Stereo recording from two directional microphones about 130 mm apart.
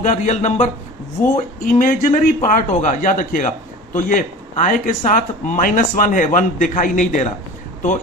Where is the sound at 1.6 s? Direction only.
90° left.